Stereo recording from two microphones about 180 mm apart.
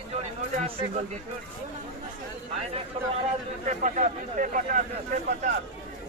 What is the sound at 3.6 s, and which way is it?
Speech, 45° right (ahead or behind).